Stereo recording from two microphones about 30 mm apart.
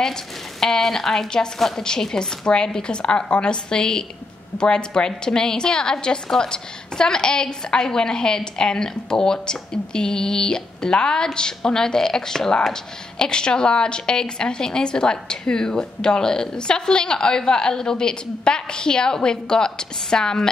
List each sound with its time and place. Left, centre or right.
0.0 s a woman's voice: centre; by 3.5 s left
3.7 s a woman's voice: left